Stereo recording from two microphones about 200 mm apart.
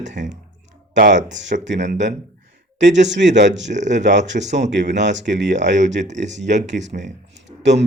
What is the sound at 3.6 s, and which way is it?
Speech, 35° right (ahead or behind).